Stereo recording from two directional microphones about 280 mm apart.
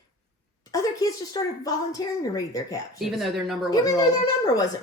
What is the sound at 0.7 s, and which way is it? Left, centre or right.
Speech, centre.